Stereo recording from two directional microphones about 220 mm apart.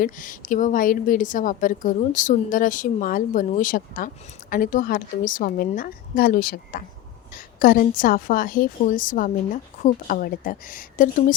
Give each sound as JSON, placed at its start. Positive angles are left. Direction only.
{"t": 0.0, "sound": "a woman's voice", "side_deg": 35}